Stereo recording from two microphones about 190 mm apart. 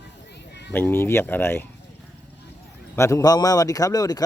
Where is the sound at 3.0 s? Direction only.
15° left (ahead or behind).